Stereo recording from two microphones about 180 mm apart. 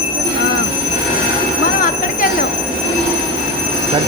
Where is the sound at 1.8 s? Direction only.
50° left (ahead or behind).